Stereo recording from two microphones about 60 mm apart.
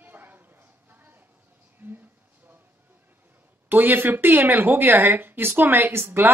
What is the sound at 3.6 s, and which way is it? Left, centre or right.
A woman's voice, right.